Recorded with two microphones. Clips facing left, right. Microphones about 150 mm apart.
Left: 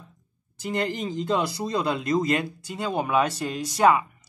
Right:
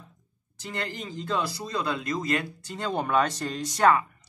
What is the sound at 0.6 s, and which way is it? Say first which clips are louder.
Speech: left 7 dB; 15° left (ahead or behind).